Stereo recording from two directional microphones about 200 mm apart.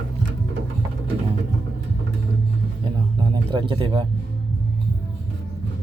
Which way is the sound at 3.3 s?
25° right (ahead or behind).